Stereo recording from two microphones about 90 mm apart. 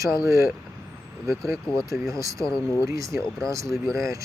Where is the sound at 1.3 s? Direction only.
35° right (ahead or behind).